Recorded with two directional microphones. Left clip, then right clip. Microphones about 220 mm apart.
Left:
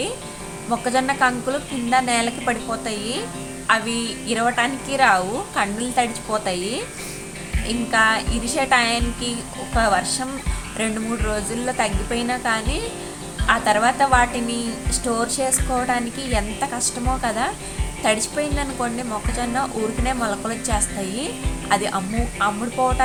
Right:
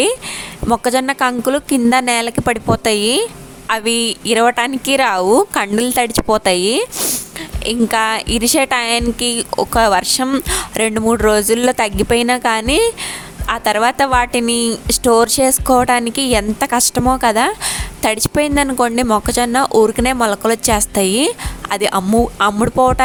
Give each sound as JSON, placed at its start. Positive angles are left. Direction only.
{"t": 0.7, "sound": "speech", "side_deg": -50}